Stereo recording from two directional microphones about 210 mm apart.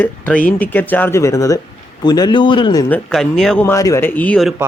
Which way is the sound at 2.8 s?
5° left (ahead or behind).